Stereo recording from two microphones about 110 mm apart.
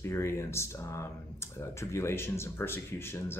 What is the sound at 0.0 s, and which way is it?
Speech, 25° left (ahead or behind).